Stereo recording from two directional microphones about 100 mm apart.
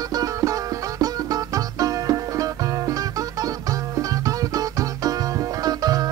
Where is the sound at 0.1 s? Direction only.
35° right (ahead or behind).